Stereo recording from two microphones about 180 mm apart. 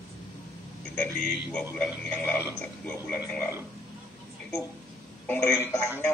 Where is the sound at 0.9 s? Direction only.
10° left (ahead or behind).